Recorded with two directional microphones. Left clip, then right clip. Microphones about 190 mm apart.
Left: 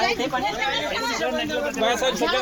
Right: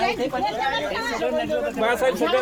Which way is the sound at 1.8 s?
55° right (ahead or behind).